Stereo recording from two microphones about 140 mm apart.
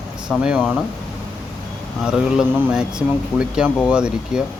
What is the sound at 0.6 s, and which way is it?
Speech, 5° left (ahead or behind).